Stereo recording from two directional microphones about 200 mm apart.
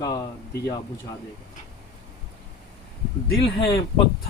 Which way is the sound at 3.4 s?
25° left (ahead or behind).